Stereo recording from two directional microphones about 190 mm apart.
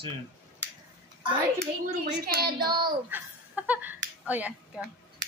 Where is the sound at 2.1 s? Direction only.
55° right (ahead or behind).